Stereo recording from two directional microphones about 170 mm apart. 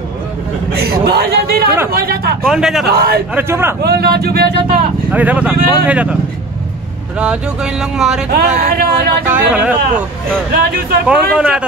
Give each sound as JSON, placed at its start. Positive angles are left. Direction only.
{"t": 0.7, "sound": "a man's voice", "side_deg": -70}
{"t": 2.4, "sound": "speech", "side_deg": -5}
{"t": 2.9, "sound": "speech", "side_deg": -65}
{"t": 3.3, "sound": "a man's voice", "side_deg": -15}
{"t": 3.8, "sound": "speech", "side_deg": -65}
{"t": 5.1, "sound": "a man's voice", "side_deg": -10}
{"t": 7.2, "sound": "speech", "side_deg": -5}
{"t": 8.3, "sound": "speech", "side_deg": -65}
{"t": 9.3, "sound": "a man's voice", "side_deg": -10}
{"t": 10.5, "sound": "speech", "side_deg": -60}
{"t": 11.1, "sound": "a man's voice", "side_deg": -5}